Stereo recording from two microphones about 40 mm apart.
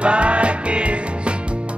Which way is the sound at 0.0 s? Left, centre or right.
Right.